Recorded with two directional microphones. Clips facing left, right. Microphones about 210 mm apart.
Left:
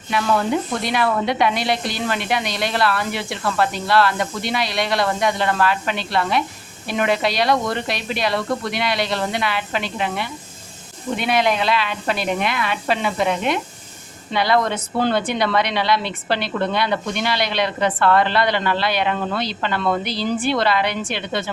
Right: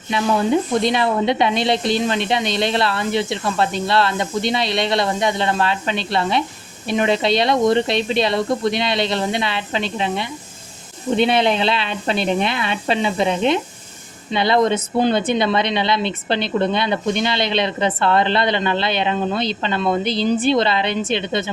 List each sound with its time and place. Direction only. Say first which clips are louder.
0.1 s a woman's voice: right 2 dB; 20° right (ahead or behind)